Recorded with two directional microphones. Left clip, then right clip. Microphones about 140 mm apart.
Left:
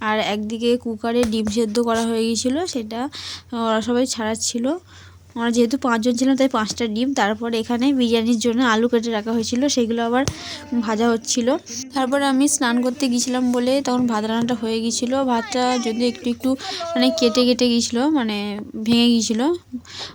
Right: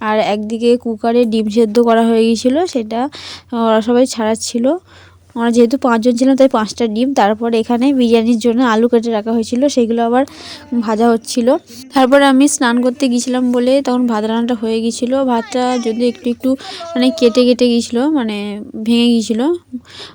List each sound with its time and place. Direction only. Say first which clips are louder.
0.0 s speech: right 7 dB; 45° right (ahead or behind)
11.9 s speech: right 10 dB; 75° right (ahead or behind); by 15.7 s 35° right (ahead or behind)
15.7 s speech: right 5 dB; centre (ahead or behind)
16.0 s speech: right 6 dB; 35° right (ahead or behind)